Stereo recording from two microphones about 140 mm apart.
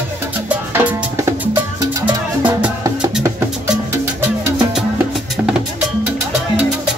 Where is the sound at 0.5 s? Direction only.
15° right (ahead or behind).